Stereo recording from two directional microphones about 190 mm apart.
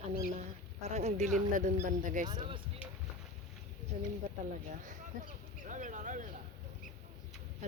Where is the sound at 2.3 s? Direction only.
25° right (ahead or behind).